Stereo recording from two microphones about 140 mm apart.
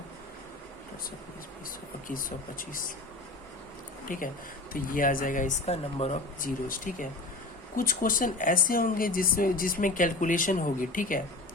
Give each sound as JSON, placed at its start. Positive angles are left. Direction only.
{"t": 2.0, "sound": "speech", "side_deg": 80}
{"t": 4.1, "sound": "speech", "side_deg": 75}
{"t": 6.4, "sound": "speech", "side_deg": 75}
{"t": 7.8, "sound": "speech", "side_deg": 90}